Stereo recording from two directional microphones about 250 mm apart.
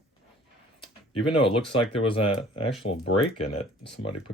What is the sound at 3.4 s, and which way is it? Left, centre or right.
Speech, left.